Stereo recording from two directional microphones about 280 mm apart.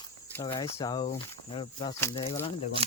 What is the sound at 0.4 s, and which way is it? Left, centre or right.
Speech, centre.